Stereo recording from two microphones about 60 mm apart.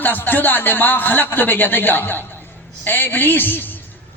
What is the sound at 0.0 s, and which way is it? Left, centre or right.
A man's voice, left.